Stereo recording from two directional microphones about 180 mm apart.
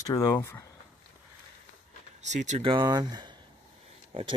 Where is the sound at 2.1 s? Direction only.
40° right (ahead or behind).